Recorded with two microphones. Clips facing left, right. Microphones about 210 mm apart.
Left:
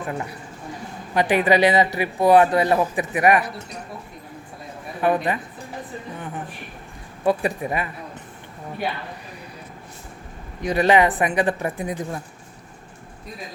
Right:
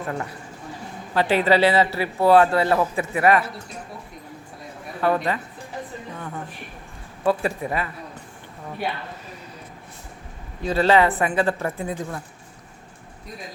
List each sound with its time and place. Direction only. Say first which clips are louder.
0.1 s speech: even; 15° left (ahead or behind)
4.9 s a woman's voice: left 1 dB; 15° left (ahead or behind)
6.1 s a sound: left 1 dB; 20° left (ahead or behind)
7.3 s speech: left 1 dB; 15° left (ahead or behind)
10.6 s speech: left 1 dB; 15° left (ahead or behind)